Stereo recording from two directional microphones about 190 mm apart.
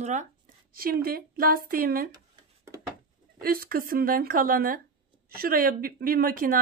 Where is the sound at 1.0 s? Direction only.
50° right (ahead or behind).